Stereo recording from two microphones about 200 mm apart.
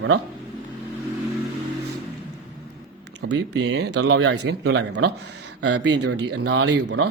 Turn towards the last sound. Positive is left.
turn(degrees=-75)  # may be behind; listen again after turning